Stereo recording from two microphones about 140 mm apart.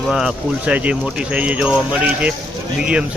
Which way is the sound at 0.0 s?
Centre (ahead or behind).